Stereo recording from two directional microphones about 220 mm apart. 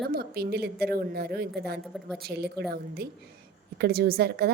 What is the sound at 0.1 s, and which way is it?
A woman's voice, 45° right (ahead or behind).